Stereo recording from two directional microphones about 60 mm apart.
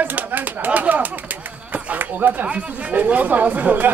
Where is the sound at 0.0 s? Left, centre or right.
Right.